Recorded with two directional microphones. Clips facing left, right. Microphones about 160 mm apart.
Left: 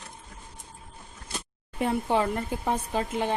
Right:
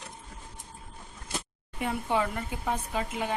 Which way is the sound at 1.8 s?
35° left (ahead or behind).